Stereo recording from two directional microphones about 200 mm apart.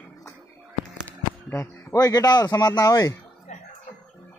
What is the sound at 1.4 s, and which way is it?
A man's voice, 15° left (ahead or behind).